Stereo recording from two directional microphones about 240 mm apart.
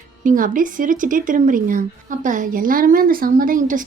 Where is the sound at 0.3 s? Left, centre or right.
Right.